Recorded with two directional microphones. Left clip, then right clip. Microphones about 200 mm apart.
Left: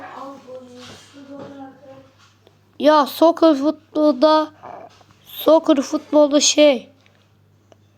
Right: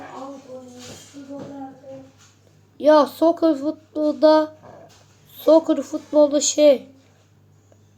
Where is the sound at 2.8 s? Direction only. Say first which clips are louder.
Left 1 dB; 35° left (ahead or behind).